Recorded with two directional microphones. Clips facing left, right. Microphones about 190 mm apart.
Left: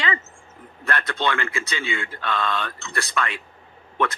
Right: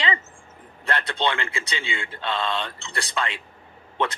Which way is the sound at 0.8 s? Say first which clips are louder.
Even; 30° right (ahead or behind).